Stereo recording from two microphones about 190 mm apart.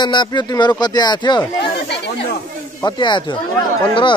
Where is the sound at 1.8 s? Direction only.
60° left (ahead or behind).